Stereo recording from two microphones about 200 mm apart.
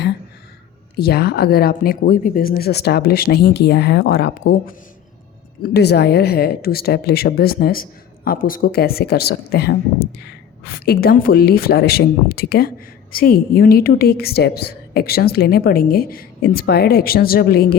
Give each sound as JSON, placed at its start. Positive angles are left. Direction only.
{"t": 0.9, "sound": "speech", "side_deg": 50}